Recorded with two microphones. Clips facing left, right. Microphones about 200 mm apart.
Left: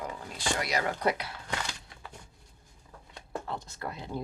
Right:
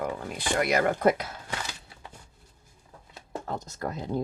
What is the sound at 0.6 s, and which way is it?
Speech, 50° right (ahead or behind).